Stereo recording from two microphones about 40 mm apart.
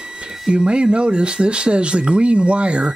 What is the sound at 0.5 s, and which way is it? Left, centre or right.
Speech, right.